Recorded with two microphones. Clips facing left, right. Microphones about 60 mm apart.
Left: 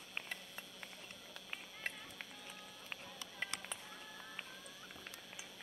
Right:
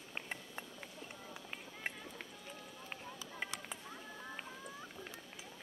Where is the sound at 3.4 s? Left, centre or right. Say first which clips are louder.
Even; centre.